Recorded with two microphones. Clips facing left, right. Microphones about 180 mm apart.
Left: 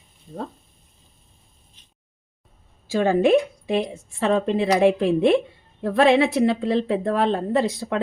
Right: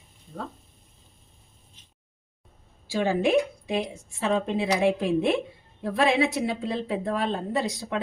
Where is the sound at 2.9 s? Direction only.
55° left (ahead or behind).